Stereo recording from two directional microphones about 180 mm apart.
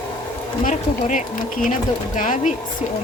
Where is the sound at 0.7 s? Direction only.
45° left (ahead or behind).